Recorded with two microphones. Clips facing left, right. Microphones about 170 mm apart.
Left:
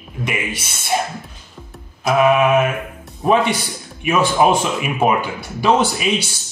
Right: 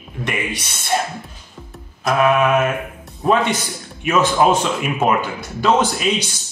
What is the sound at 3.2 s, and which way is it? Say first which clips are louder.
Speech: left 1 dB; 15° left (ahead or behind).